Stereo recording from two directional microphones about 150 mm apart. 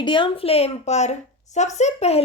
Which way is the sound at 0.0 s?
35° left (ahead or behind).